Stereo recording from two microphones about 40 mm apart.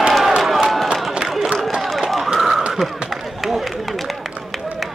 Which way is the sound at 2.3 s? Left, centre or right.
Centre.